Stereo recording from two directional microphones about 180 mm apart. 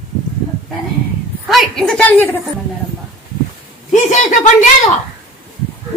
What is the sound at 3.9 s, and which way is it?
Speech, 45° left (ahead or behind).